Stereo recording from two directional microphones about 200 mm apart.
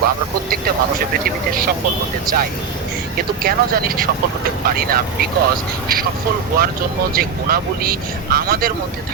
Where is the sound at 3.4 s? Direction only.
50° right (ahead or behind).